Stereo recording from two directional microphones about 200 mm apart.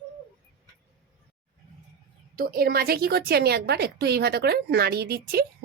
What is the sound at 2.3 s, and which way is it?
A woman's voice, 45° right (ahead or behind).